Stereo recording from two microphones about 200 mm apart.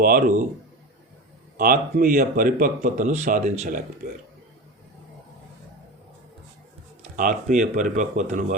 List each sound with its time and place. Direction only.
0.0 s speech: 45° right (ahead or behind)
1.5 s speech: 45° right (ahead or behind)
7.0 s speech: 40° right (ahead or behind)